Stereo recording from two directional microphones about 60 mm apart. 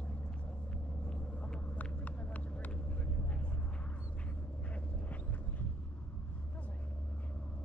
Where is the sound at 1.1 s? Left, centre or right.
Centre.